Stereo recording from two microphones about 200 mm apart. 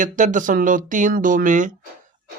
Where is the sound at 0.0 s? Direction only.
40° right (ahead or behind).